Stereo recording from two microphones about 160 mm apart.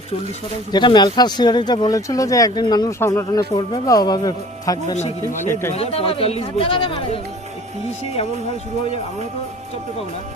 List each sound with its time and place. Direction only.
0.7 s speech: 25° left (ahead or behind)
4.9 s a man's voice: 45° left (ahead or behind)